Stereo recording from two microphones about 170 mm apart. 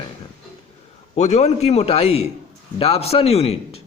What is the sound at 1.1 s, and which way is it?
Speech, 40° left (ahead or behind).